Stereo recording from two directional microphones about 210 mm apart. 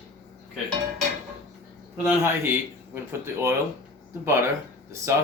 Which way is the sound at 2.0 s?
10° right (ahead or behind).